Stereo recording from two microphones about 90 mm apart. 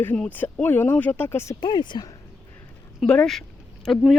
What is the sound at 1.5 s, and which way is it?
Speech, 55° left (ahead or behind).